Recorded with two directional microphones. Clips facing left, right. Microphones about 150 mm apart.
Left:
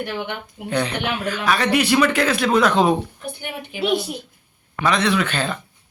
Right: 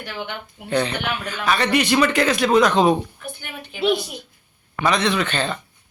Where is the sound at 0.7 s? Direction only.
5° left (ahead or behind).